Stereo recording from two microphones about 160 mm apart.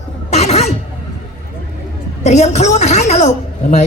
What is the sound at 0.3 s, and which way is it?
Cough, 45° left (ahead or behind).